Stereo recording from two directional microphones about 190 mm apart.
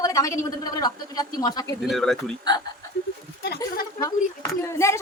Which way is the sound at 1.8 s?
Centre (ahead or behind).